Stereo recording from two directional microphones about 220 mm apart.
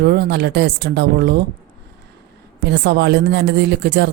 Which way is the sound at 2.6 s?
50° right (ahead or behind).